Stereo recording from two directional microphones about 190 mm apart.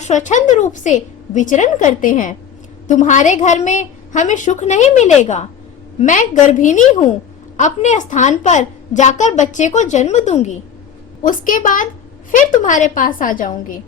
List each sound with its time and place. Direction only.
0.0 s a woman's voice: 40° left (ahead or behind)